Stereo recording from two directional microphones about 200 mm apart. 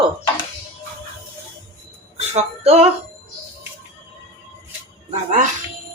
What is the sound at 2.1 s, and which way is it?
Music, 35° right (ahead or behind).